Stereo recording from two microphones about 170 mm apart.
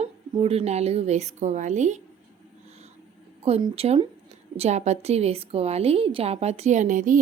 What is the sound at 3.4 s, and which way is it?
A woman's voice, 35° right (ahead or behind).